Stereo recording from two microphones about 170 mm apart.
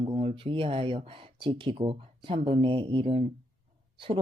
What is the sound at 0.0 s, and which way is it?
Speech, 35° right (ahead or behind).